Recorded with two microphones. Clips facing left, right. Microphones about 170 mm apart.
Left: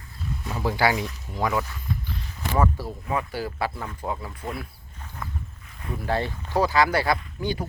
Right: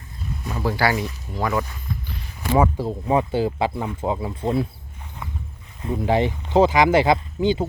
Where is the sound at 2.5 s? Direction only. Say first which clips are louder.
Right 5 dB; 20° right (ahead or behind).